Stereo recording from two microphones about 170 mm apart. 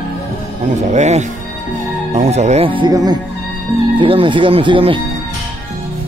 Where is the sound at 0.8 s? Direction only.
45° right (ahead or behind).